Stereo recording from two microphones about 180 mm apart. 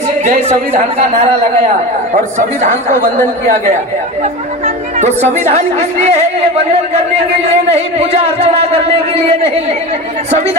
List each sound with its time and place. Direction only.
0.2 s a woman's voice: 40° right (ahead or behind)
4.9 s a woman's voice: 35° right (ahead or behind)
7.7 s a woman's voice: 35° right (ahead or behind)